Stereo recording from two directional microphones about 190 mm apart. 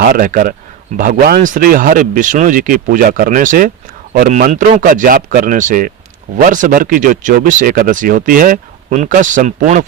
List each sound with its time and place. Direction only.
0.1 s speech: 45° right (ahead or behind)